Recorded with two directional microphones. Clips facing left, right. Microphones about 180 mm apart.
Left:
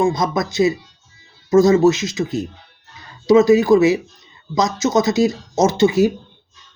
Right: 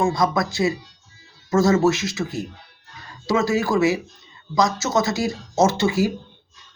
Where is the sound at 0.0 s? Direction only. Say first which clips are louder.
Left 2 dB; 20° left (ahead or behind).